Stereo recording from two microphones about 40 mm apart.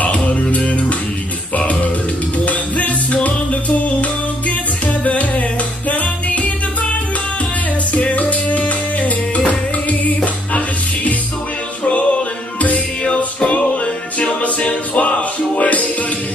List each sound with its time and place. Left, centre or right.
0.0 s music: left
2.4 s music: left
5.9 s music: left
7.9 s music: left
13.0 s music: left